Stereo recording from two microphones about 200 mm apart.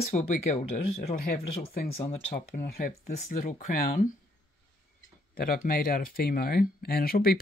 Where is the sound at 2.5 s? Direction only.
40° left (ahead or behind).